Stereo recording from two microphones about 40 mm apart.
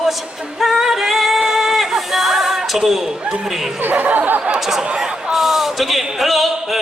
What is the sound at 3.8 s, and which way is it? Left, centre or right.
Speech, right.